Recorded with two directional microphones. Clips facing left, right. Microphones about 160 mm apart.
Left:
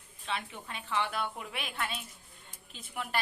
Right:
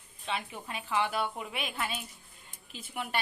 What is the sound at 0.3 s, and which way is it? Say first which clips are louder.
A woman's voice: right 2 dB; 5° right (ahead or behind).